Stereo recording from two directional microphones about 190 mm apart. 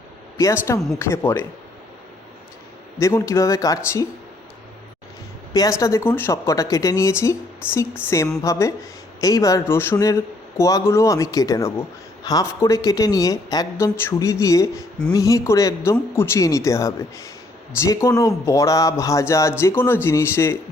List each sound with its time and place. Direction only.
0.3 s speech: 15° left (ahead or behind)
3.0 s speech: 15° left (ahead or behind)
5.5 s speech: 15° left (ahead or behind)